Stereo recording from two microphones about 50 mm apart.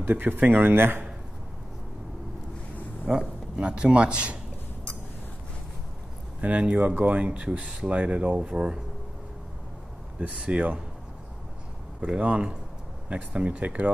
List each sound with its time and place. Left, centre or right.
0.1 s a man's voice: right
3.1 s speech: centre
6.4 s speech: right
8.4 s speech: centre
10.1 s speech: right
12.0 s speech: right